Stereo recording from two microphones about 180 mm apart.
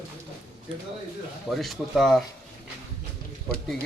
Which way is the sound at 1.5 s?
Centre (ahead or behind).